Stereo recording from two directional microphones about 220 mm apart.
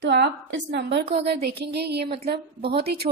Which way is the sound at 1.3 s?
45° right (ahead or behind).